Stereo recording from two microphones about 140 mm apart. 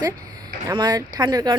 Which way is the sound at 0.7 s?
30° right (ahead or behind).